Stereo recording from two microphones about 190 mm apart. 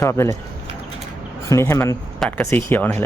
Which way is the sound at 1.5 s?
15° left (ahead or behind).